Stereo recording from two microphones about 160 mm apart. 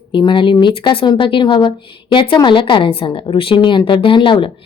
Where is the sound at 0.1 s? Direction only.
30° left (ahead or behind).